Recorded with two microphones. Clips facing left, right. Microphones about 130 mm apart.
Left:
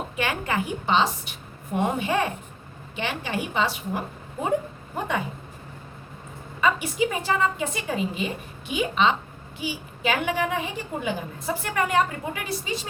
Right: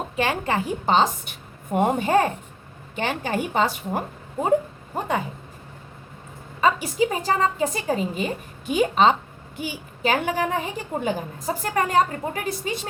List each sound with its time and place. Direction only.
0.2 s a woman's voice: 35° right (ahead or behind)
4.9 s a woman's voice: 35° right (ahead or behind)
6.6 s a woman's voice: 35° right (ahead or behind); by 12.9 s 50° right (ahead or behind)